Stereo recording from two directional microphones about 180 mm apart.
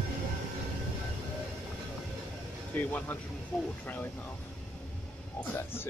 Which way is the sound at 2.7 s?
10° left (ahead or behind).